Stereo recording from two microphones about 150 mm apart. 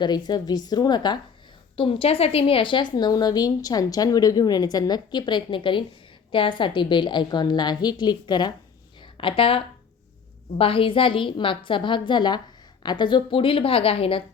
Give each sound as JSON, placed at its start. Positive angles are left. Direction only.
{"t": 0.0, "sound": "a woman's voice", "side_deg": 30}